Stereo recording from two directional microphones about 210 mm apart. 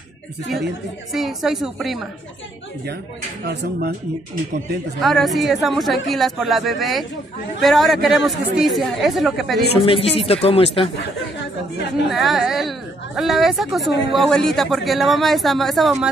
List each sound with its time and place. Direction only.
1.1 s speech: centre (ahead or behind)
5.0 s speech: centre (ahead or behind)
9.8 s speech: 25° left (ahead or behind)
12.1 s speech: centre (ahead or behind)